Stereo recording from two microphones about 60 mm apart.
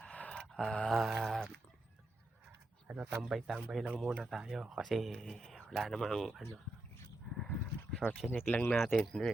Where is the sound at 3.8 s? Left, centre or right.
Centre.